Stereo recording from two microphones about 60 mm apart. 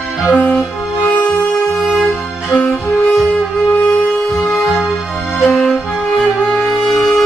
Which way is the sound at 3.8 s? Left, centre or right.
Centre.